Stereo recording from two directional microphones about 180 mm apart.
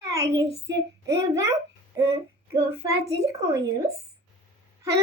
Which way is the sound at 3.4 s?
15° right (ahead or behind).